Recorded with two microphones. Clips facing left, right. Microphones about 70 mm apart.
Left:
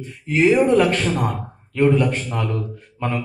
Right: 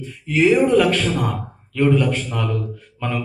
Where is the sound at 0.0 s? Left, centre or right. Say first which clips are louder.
Even; left.